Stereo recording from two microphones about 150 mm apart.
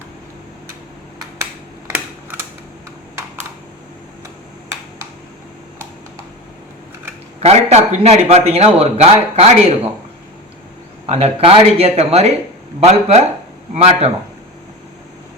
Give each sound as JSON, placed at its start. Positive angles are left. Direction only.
{"t": 1.9, "sound": "camera", "side_deg": -15}
{"t": 7.4, "sound": "a man's voice", "side_deg": -45}
{"t": 11.0, "sound": "a man's voice", "side_deg": -45}